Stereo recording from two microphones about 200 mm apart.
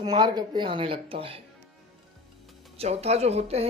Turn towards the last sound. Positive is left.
turn(degrees=-30)  # may be behind; listen again after turning